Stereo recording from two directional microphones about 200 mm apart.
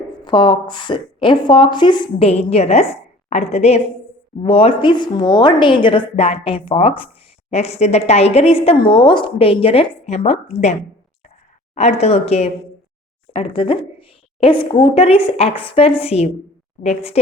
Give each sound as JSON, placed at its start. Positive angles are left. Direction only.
{"t": 0.3, "sound": "a woman's voice", "side_deg": 25}